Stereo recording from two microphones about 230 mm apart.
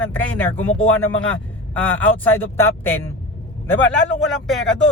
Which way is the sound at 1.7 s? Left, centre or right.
Centre.